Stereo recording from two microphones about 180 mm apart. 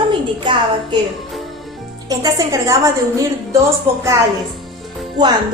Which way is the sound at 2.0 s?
20° right (ahead or behind).